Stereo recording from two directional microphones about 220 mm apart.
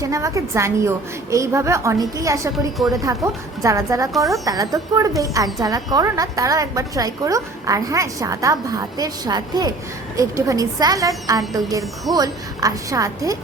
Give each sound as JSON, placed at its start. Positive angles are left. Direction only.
{"t": 0.0, "sound": "a woman's voice", "side_deg": -15}